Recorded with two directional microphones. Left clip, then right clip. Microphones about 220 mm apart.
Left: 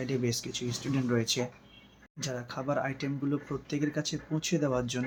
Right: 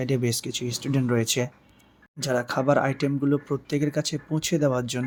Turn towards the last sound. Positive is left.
turn(degrees=-45)  # may be behind; listen again after turning